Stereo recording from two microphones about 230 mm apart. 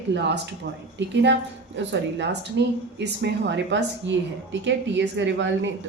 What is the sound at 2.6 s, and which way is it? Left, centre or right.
A woman's voice, right.